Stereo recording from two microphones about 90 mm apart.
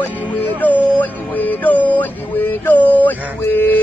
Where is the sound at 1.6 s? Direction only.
20° left (ahead or behind).